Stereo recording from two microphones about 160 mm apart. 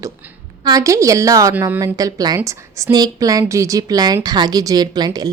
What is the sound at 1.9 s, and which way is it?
A woman's voice, 25° right (ahead or behind).